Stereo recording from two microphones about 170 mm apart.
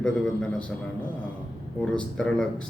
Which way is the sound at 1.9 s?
5° left (ahead or behind).